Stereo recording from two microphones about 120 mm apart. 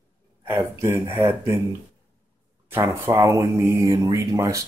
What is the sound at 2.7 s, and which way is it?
Speech, 20° right (ahead or behind).